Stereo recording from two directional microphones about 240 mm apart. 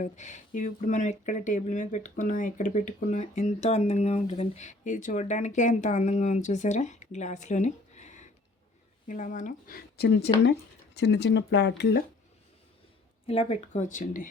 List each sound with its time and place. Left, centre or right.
0.0 s speech: left
13.2 s speech: left